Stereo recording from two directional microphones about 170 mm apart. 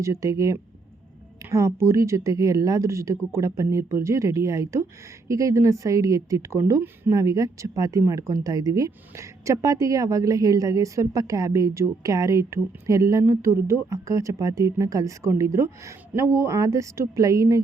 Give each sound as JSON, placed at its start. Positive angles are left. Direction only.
{"t": 0.0, "sound": "speech", "side_deg": -20}